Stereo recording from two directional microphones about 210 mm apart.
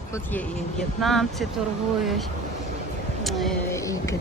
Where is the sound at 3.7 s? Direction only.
15° left (ahead or behind).